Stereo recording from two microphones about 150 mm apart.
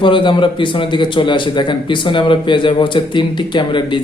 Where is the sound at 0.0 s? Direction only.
35° left (ahead or behind).